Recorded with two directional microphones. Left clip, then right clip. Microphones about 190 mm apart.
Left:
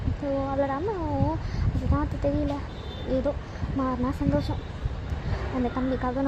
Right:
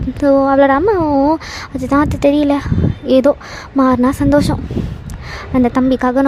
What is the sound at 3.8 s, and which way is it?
Speech, 50° right (ahead or behind).